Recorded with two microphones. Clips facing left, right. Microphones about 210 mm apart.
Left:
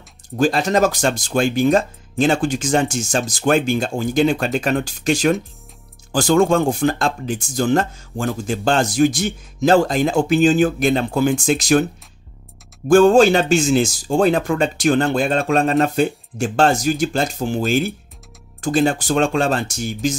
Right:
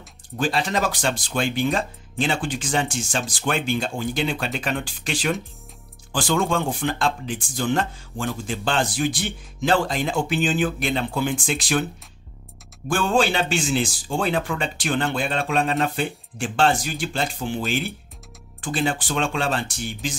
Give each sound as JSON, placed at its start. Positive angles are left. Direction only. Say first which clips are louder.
{"t": 0.4, "sound": "speech", "louder": "left 7 dB", "side_deg": 45}
{"t": 12.8, "sound": "speech", "louder": "left 10 dB", "side_deg": 45}